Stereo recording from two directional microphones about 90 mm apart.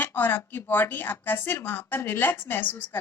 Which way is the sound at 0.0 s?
20° left (ahead or behind).